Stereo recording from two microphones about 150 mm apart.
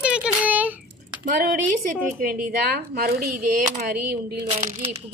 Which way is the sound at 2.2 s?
90° right.